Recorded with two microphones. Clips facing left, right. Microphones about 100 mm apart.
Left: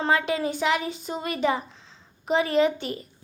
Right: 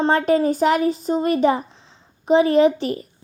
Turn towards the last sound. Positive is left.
turn(degrees=-40)  # may be behind; listen again after turning